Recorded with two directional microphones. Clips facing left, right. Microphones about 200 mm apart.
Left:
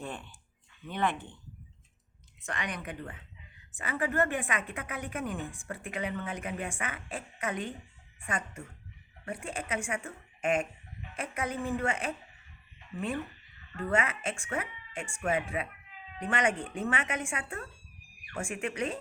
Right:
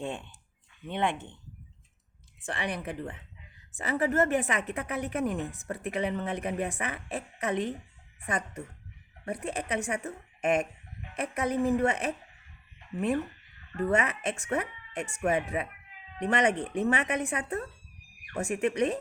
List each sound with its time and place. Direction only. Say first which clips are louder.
0.0 s speech: right 5 dB; 25° right (ahead or behind)
2.4 s speech: right 4 dB; 30° right (ahead or behind)
13.7 s speech: right 3 dB; 40° right (ahead or behind)
16.6 s speech: right 5 dB; 35° right (ahead or behind)